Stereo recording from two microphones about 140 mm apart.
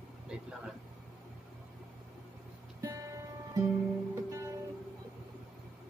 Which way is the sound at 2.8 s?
25° right (ahead or behind).